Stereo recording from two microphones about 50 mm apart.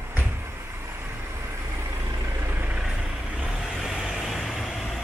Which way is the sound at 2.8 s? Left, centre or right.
Centre.